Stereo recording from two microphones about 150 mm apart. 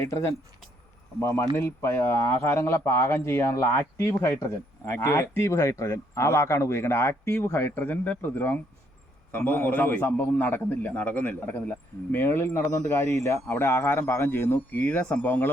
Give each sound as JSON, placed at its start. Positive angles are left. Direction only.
{"t": 0.0, "sound": "speech", "side_deg": 20}